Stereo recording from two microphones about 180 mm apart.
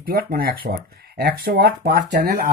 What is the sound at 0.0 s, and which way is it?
Speech, 55° right (ahead or behind).